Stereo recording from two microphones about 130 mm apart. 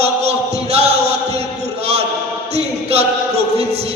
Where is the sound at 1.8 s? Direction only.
50° right (ahead or behind).